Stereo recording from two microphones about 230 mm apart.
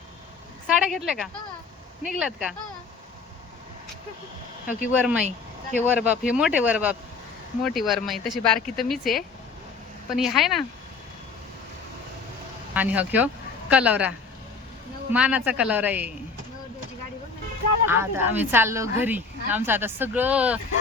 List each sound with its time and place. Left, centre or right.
0.7 s speech: centre
4.6 s speech: left
4.9 s speech: centre
12.7 s speech: centre
15.1 s speech: centre
17.8 s speech: centre